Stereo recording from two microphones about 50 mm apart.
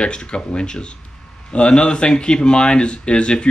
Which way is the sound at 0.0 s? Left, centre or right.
Centre.